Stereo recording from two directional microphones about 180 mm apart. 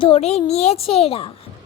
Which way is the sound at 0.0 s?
35° left (ahead or behind).